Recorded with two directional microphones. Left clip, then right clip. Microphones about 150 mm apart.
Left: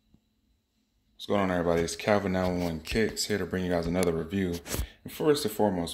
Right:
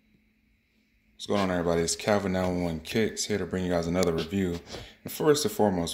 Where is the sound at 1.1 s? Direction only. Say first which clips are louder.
Even; centre (ahead or behind).